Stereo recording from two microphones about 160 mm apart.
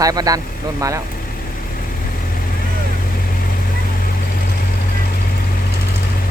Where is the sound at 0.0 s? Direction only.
25° right (ahead or behind).